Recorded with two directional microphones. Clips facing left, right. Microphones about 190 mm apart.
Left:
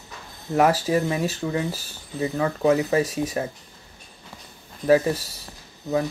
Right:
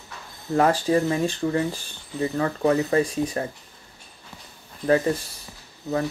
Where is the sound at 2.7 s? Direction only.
20° left (ahead or behind).